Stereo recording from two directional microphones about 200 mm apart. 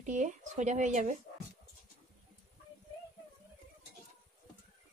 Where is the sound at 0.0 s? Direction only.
35° right (ahead or behind).